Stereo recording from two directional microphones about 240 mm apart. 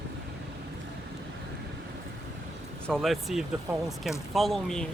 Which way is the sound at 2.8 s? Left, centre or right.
Centre.